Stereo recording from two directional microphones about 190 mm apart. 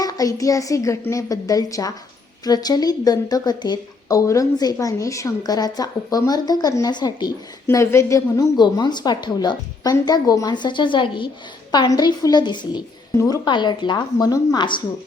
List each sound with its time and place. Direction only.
0.0 s a woman's voice: 20° left (ahead or behind)